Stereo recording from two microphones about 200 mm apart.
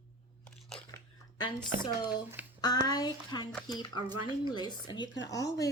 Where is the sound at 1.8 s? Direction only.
20° left (ahead or behind).